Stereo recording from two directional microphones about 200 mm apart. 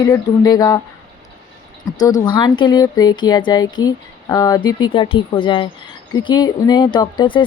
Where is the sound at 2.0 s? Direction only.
20° left (ahead or behind).